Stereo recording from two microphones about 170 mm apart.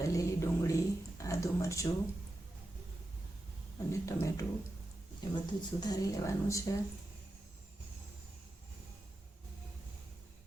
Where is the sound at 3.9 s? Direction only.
15° left (ahead or behind).